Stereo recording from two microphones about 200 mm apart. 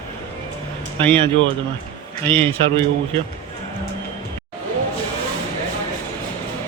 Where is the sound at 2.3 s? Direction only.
25° right (ahead or behind).